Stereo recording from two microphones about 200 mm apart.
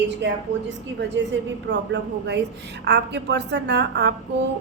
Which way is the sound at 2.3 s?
55° right (ahead or behind).